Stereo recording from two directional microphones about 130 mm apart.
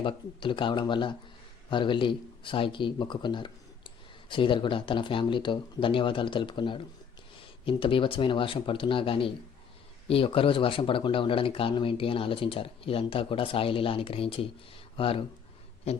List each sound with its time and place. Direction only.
0.0 s speech: 40° left (ahead or behind)